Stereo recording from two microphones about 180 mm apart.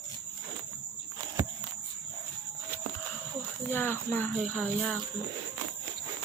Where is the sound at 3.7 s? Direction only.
10° left (ahead or behind).